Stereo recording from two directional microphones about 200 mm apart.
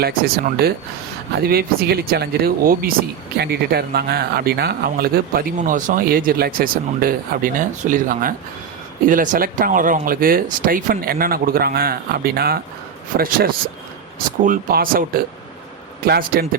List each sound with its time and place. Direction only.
0.0 s speech: 50° right (ahead or behind)